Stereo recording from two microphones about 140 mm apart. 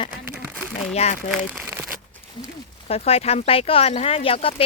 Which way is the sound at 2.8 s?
45° left (ahead or behind).